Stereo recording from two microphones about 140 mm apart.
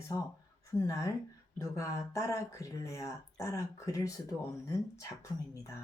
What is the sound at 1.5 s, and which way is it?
Speech, 20° left (ahead or behind).